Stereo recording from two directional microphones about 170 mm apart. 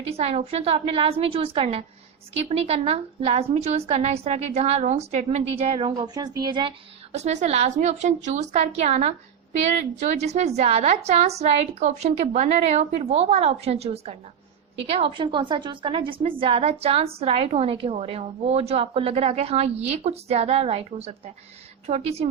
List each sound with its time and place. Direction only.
0.0 s a woman's voice: 40° right (ahead or behind)